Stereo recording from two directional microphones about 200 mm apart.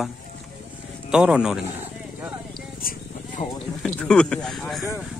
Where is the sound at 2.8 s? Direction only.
45° left (ahead or behind).